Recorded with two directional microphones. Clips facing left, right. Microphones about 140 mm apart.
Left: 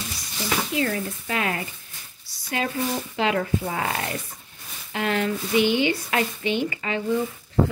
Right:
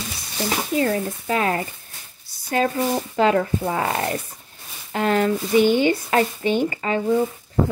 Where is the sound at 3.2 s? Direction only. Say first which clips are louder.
Right 5 dB; 40° right (ahead or behind).